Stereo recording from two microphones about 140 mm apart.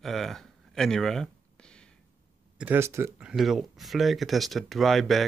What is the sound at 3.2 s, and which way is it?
Speech, 5° right (ahead or behind).